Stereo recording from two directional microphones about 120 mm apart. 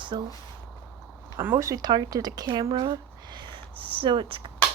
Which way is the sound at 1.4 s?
20° right (ahead or behind).